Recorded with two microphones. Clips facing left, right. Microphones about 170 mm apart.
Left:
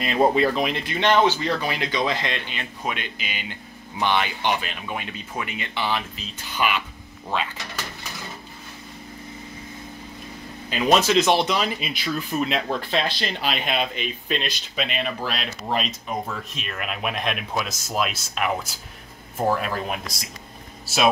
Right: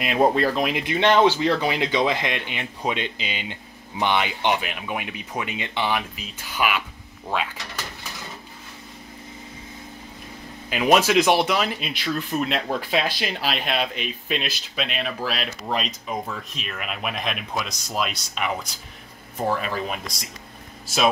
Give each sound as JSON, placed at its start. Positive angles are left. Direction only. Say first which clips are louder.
{"t": 0.0, "sound": "speech", "louder": "even", "side_deg": -10}
{"t": 0.8, "sound": "speech", "louder": "right 2 dB", "side_deg": -20}
{"t": 10.7, "sound": "speech", "louder": "right 1 dB", "side_deg": -10}